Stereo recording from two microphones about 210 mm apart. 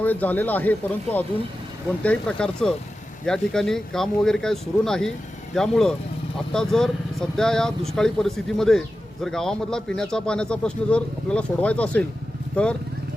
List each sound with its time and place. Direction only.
0.0 s speech: 10° left (ahead or behind)
2.0 s speech: 5° left (ahead or behind)